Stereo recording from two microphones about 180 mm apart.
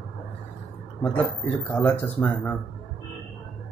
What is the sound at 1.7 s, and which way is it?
Speech, 10° left (ahead or behind).